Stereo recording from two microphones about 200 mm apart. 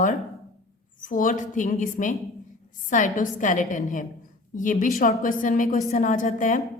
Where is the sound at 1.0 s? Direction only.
40° left (ahead or behind).